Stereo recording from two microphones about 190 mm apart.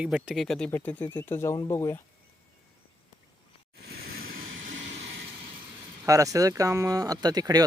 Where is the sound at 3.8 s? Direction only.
55° right (ahead or behind).